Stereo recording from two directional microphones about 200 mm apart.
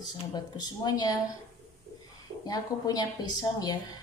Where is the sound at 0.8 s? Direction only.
20° left (ahead or behind).